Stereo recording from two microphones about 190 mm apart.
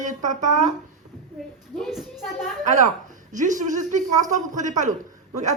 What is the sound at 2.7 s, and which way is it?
Speech, 40° right (ahead or behind).